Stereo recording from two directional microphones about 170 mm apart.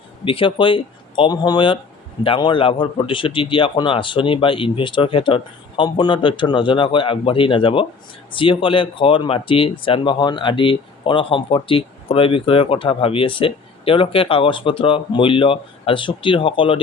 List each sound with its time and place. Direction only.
0.3 s speech: 30° left (ahead or behind)